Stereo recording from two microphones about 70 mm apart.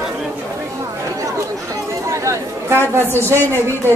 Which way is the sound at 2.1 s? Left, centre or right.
Right.